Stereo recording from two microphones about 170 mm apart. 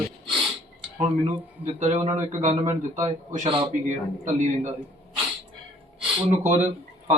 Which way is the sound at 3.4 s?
30° right (ahead or behind).